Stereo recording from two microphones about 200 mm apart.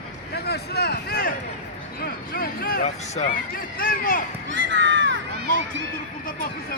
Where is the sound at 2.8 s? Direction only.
35° left (ahead or behind).